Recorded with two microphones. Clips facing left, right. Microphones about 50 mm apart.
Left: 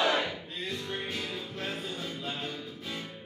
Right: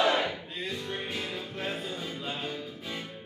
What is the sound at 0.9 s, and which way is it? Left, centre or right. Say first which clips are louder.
Music: right 1 dB; centre.